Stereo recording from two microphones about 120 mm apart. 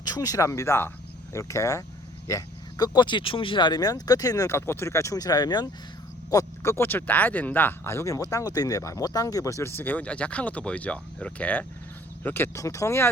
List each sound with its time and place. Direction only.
0.0 s speech: 30° left (ahead or behind)
6.3 s speech: 25° left (ahead or behind)